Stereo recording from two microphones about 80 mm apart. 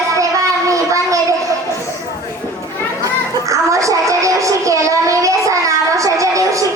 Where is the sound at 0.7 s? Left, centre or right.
Right.